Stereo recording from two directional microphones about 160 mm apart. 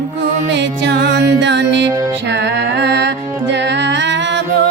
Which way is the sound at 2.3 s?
90° right.